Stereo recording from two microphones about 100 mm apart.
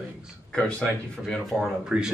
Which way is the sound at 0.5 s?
10° left (ahead or behind).